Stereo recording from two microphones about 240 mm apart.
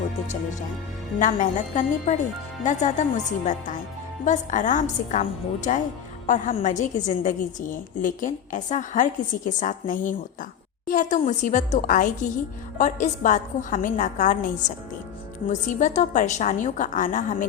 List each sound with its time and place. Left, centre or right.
1.2 s a woman's voice: left
4.3 s a woman's voice: left